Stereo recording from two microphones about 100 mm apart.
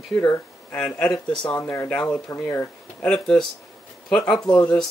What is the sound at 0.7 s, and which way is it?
Speech, 10° left (ahead or behind).